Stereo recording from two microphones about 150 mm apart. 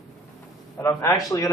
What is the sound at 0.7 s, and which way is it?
Speech, 20° left (ahead or behind).